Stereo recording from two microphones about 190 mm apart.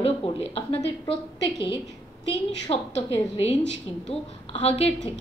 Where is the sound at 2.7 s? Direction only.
30° left (ahead or behind).